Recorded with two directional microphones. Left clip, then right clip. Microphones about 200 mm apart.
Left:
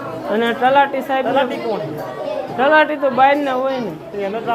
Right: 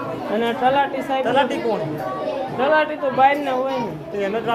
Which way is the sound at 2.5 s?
45° left (ahead or behind).